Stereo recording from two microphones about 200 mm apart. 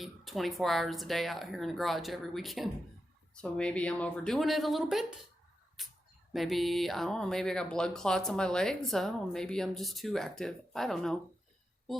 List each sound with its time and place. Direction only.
0.0 s speech: centre (ahead or behind)